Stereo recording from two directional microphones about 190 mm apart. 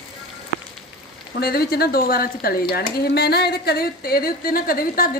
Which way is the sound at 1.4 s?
55° left (ahead or behind).